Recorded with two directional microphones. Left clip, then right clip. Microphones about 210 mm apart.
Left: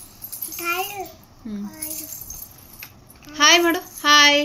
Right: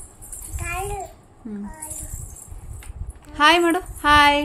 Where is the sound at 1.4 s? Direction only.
20° right (ahead or behind).